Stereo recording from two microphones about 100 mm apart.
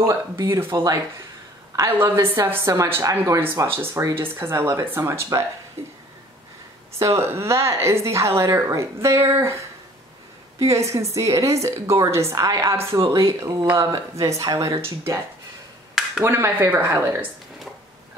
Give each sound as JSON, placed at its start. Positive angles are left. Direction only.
{"t": 0.0, "sound": "a woman's voice", "side_deg": -25}
{"t": 2.0, "sound": "a woman's voice", "side_deg": -25}
{"t": 7.0, "sound": "a woman's voice", "side_deg": -30}
{"t": 10.6, "sound": "a woman's voice", "side_deg": -30}
{"t": 16.3, "sound": "a woman's voice", "side_deg": -25}